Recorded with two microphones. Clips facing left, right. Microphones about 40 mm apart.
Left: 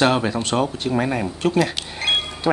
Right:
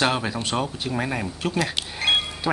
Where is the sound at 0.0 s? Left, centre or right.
Centre.